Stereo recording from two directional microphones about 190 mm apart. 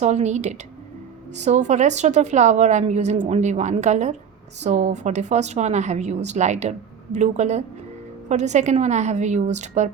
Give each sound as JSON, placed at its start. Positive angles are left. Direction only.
{"t": 0.0, "sound": "speech", "side_deg": -35}